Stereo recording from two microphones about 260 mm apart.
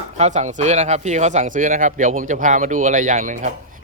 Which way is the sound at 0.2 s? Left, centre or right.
Right.